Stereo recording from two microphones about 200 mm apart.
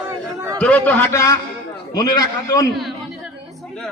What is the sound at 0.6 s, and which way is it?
A man's voice, 5° left (ahead or behind).